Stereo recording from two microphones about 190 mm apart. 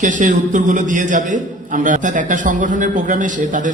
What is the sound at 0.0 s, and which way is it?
A man's voice, 40° right (ahead or behind).